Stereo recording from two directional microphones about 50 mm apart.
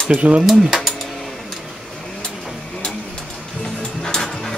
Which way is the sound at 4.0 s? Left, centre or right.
Centre.